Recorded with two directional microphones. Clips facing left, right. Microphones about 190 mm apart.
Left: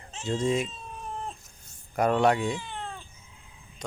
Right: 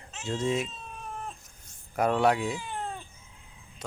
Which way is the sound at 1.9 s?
5° right (ahead or behind).